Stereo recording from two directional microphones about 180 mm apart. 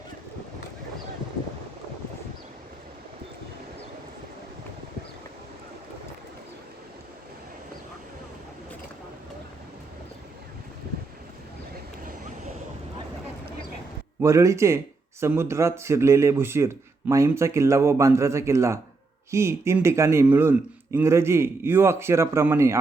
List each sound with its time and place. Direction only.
14.2 s speech: 15° right (ahead or behind)